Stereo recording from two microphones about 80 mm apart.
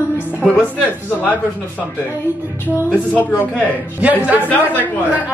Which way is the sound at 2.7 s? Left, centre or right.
Right.